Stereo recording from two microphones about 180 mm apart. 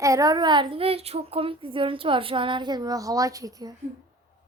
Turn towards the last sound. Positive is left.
turn(degrees=-20)  # may be behind; listen again after turning